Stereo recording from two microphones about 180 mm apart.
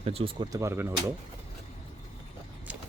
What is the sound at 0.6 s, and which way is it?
Speech, 15° right (ahead or behind).